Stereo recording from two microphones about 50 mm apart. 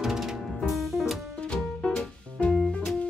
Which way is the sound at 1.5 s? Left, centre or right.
Left.